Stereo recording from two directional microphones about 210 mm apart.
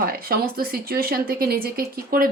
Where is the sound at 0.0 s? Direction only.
45° right (ahead or behind).